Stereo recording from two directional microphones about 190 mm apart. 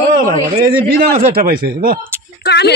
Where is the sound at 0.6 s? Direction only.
55° right (ahead or behind).